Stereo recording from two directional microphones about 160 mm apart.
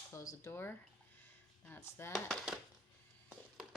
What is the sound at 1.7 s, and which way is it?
Speech, 15° left (ahead or behind).